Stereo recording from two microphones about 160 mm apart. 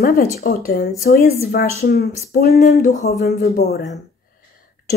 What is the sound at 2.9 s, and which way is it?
Speech, 45° left (ahead or behind).